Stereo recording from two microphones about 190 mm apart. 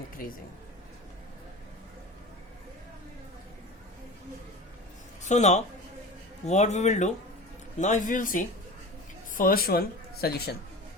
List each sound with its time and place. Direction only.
0.2 s speech: 50° left (ahead or behind)
5.2 s a man's voice: 40° left (ahead or behind); by 10.5 s 55° left (ahead or behind)